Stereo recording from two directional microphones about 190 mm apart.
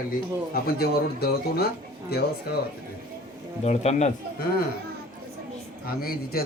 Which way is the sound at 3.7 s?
35° left (ahead or behind).